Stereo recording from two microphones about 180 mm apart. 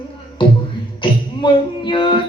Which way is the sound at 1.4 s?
25° left (ahead or behind).